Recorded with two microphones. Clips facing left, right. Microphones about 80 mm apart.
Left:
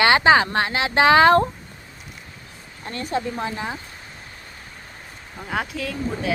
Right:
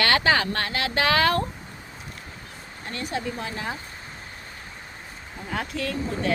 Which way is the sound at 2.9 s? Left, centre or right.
Left.